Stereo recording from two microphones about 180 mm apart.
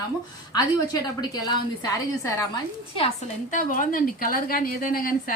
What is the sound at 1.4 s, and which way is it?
Speech, 20° left (ahead or behind).